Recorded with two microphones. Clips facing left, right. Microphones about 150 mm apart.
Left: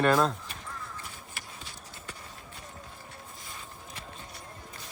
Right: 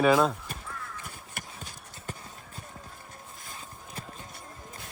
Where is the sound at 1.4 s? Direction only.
45° right (ahead or behind).